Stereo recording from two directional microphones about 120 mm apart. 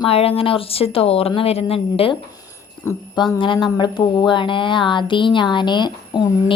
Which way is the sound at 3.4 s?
40° left (ahead or behind).